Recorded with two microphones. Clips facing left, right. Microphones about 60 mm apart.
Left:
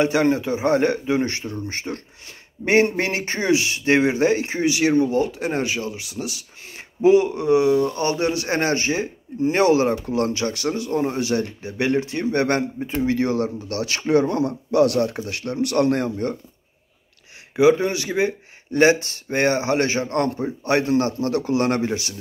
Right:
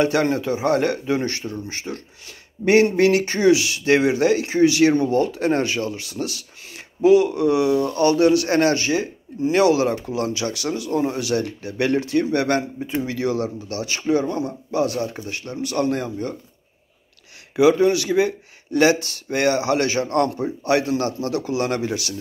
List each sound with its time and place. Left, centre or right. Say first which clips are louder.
0.0 s speech: left 1 dB; centre
6.6 s speech: left 1 dB; left
17.6 s speech: right 1 dB; left